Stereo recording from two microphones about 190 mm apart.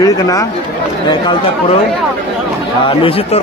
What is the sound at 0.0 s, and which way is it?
Speech, 15° left (ahead or behind).